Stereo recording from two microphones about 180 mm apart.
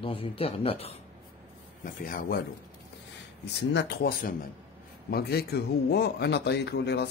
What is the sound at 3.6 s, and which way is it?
A man's voice, 70° left (ahead or behind).